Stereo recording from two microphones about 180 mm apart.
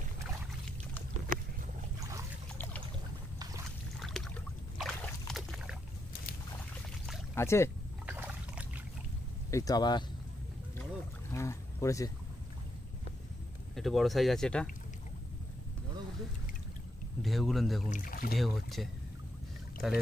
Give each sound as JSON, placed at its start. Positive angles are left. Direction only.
{"t": 4.0, "sound": "boat", "side_deg": 0}
{"t": 7.3, "sound": "speech", "side_deg": 15}
{"t": 8.1, "sound": "a sound", "side_deg": -10}
{"t": 9.5, "sound": "speech", "side_deg": 20}
{"t": 11.3, "sound": "a sound", "side_deg": 15}
{"t": 13.7, "sound": "speech", "side_deg": 0}
{"t": 17.2, "sound": "speech", "side_deg": 0}
{"t": 17.8, "sound": "speech", "side_deg": 45}
{"t": 18.4, "sound": "speech", "side_deg": 0}